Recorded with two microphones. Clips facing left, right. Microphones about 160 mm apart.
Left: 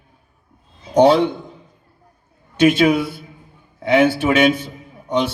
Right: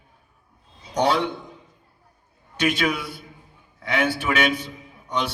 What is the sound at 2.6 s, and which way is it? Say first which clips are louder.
A man's voice: left 10 dB; 45° left (ahead or behind).